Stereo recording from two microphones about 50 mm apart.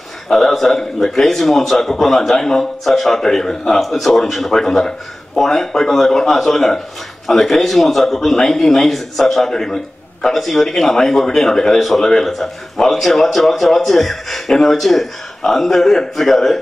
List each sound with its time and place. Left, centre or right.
0.3 s a man's voice: centre